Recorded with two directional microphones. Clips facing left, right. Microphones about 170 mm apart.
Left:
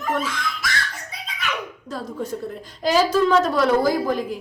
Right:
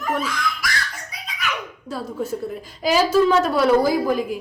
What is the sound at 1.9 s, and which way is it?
A woman's voice, 10° right (ahead or behind).